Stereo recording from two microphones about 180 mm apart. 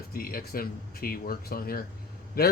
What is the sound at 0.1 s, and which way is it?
Speech, 55° left (ahead or behind).